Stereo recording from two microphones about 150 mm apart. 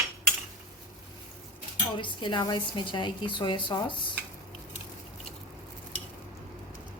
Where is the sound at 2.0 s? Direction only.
30° left (ahead or behind).